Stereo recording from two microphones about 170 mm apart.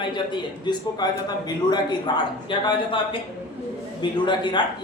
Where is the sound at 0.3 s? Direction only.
25° left (ahead or behind).